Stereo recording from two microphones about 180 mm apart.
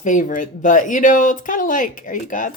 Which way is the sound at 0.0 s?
45° left (ahead or behind).